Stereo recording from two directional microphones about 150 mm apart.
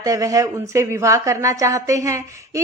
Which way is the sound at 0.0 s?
20° right (ahead or behind).